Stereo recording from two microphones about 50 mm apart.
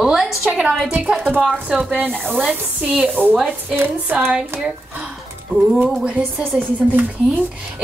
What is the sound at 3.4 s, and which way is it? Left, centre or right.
Speech, centre.